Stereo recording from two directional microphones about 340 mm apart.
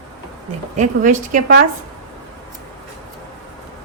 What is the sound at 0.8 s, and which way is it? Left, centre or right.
Speech, right.